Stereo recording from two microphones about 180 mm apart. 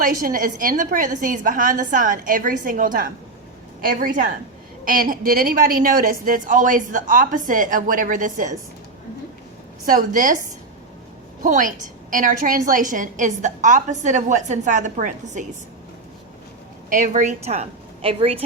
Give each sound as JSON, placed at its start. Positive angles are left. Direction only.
{"t": 0.0, "sound": "a woman's voice", "side_deg": -50}
{"t": 4.1, "sound": "a woman's voice", "side_deg": -45}
{"t": 9.8, "sound": "a woman's voice", "side_deg": -50}
{"t": 11.4, "sound": "a woman's voice", "side_deg": -45}
{"t": 16.9, "sound": "a woman's voice", "side_deg": -45}